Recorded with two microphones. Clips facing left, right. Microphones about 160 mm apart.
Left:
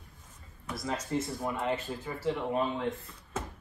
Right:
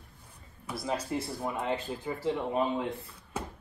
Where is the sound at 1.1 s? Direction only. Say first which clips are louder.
Left 1 dB; 15° right (ahead or behind).